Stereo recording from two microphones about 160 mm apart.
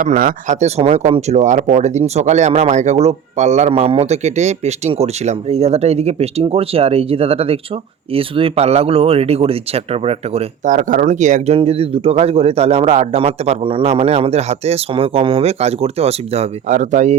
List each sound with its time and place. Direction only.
0.0 s speech: 60° right (ahead or behind); by 10.4 s 40° right (ahead or behind)
10.7 s speech: 55° right (ahead or behind)